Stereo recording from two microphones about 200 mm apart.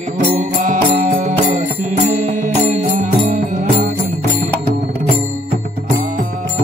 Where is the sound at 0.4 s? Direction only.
35° right (ahead or behind).